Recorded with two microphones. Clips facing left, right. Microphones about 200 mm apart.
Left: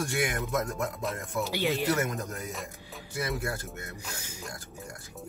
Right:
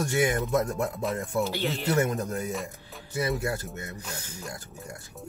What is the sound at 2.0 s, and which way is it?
Speech, 30° right (ahead or behind).